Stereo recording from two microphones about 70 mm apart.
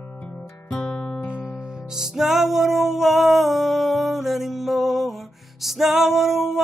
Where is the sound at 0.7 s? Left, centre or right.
Centre.